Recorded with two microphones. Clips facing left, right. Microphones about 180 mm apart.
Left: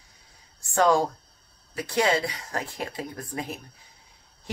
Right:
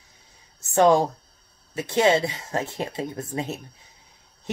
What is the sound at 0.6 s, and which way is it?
Speech, 20° right (ahead or behind).